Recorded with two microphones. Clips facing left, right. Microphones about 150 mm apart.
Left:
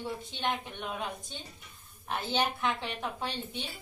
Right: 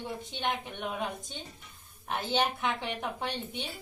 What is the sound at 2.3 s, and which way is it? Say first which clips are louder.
Speech: right 1 dB; 15° right (ahead or behind).